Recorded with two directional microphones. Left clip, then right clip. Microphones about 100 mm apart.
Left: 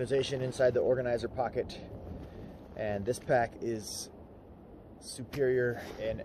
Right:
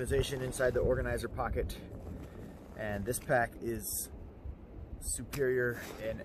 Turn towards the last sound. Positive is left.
turn(degrees=-35)  # may be behind; listen again after turning